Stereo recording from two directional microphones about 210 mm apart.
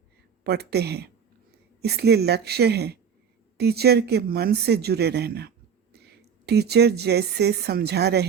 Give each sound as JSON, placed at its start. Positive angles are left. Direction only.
{"t": 0.4, "sound": "speech", "side_deg": -50}